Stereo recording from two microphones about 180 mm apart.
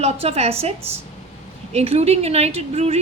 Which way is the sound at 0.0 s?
35° right (ahead or behind).